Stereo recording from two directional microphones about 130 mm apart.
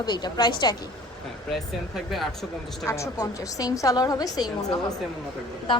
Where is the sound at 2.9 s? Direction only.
25° left (ahead or behind).